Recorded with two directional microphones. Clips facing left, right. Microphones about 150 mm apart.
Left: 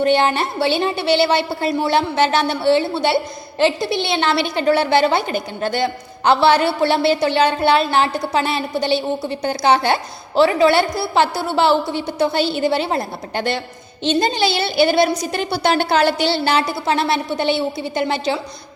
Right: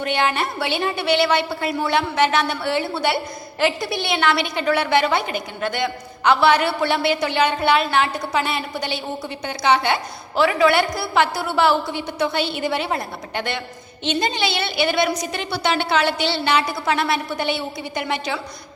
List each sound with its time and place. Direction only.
0.0 s a woman's voice: 30° left (ahead or behind)